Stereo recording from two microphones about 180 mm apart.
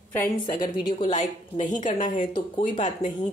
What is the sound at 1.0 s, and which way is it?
A woman's voice, 45° left (ahead or behind).